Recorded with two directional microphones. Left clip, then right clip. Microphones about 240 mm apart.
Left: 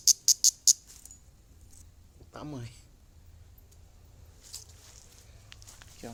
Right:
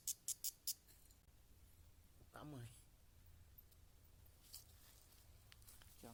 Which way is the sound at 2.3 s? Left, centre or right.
Centre.